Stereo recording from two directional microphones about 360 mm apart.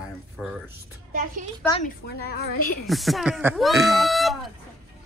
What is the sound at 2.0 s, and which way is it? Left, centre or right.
Speech, left.